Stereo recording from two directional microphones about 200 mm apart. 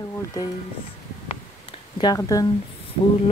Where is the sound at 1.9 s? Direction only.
20° left (ahead or behind).